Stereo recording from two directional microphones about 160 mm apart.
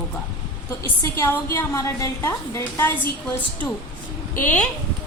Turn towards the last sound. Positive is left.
turn(degrees=10)  # may be behind; listen again after turning